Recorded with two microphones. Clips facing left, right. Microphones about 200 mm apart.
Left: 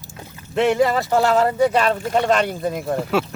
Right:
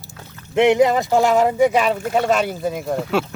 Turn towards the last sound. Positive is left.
turn(degrees=0)  # may be behind; listen again after turning